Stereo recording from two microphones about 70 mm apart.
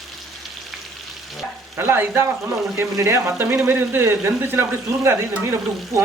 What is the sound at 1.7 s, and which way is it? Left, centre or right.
A man's voice, right.